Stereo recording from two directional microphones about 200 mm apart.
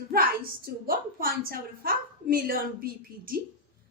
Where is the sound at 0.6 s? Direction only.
45° right (ahead or behind).